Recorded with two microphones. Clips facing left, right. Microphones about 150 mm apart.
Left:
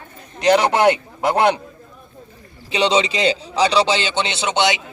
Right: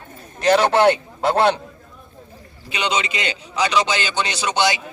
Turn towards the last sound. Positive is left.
turn(degrees=20)  # may be behind; listen again after turning